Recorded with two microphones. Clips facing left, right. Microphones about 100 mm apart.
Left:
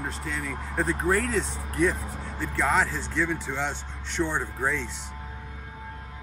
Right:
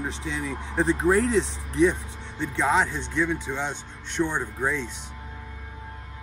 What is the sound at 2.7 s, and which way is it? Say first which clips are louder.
Speech: right 2 dB; 15° right (ahead or behind).